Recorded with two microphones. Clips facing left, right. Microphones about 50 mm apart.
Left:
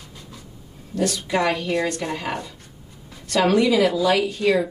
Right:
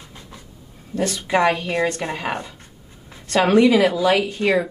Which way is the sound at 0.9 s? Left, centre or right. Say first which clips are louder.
Right 2 dB; right.